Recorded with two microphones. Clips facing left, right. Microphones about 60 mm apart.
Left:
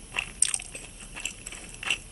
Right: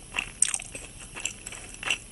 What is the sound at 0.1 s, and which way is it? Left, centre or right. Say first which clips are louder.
Biting: even; centre.